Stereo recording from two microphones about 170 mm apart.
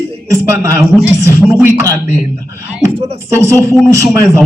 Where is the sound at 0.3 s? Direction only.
20° right (ahead or behind).